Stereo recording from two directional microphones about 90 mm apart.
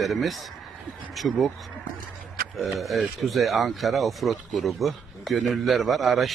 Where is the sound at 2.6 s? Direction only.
Centre (ahead or behind).